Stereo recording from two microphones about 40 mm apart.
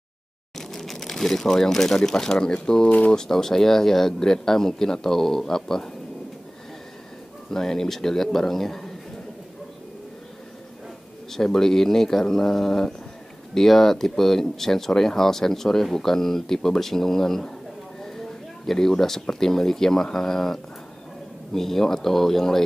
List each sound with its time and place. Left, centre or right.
0.6 s speech: centre
7.5 s speech: centre
11.3 s speech: centre